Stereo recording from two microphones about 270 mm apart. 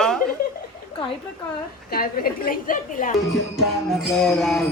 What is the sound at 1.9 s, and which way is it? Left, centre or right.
A woman's voice, left.